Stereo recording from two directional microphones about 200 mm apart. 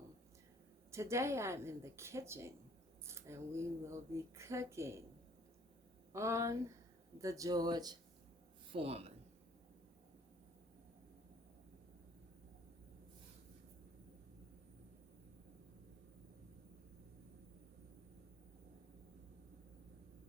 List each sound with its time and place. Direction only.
0.9 s speech: 15° right (ahead or behind)
6.1 s speech: 15° right (ahead or behind); by 9.1 s 30° right (ahead or behind)